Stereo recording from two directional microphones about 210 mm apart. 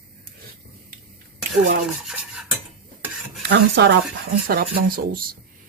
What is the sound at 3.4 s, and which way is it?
Speech, 55° right (ahead or behind).